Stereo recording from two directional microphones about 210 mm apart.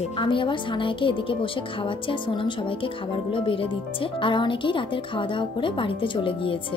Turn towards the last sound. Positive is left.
turn(degrees=25)  # may be behind; listen again after turning